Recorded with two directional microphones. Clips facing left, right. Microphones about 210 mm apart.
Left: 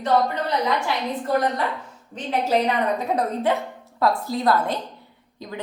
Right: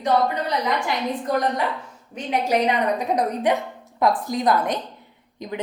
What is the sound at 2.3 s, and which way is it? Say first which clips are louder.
A woman's voice: even; 15° right (ahead or behind).